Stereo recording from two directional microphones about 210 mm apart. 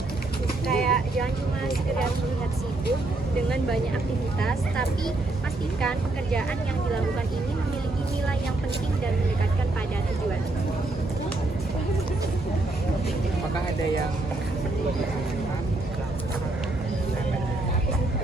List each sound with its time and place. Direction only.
0.7 s vehicle: centre (ahead or behind)